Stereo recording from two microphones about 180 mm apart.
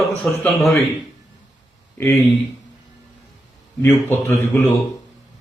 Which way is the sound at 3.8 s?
15° left (ahead or behind).